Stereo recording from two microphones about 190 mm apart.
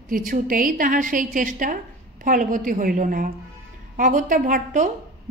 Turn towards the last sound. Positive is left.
turn(degrees=-40)  # may be behind; listen again after turning